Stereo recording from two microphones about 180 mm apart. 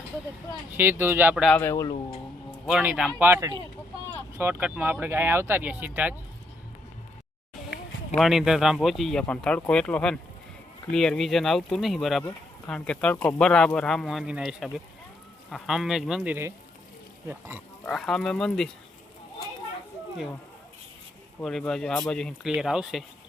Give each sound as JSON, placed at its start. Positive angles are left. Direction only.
{"t": 0.7, "sound": "speech", "side_deg": -10}
{"t": 1.5, "sound": "speech", "side_deg": 10}
{"t": 2.6, "sound": "speech", "side_deg": -5}
{"t": 8.1, "sound": "speech", "side_deg": 0}
{"t": 17.8, "sound": "speech", "side_deg": 5}
{"t": 21.4, "sound": "speech", "side_deg": 0}